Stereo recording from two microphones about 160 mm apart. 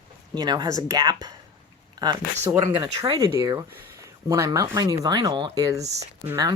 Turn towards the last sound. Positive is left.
turn(degrees=-20)  # may be behind; listen again after turning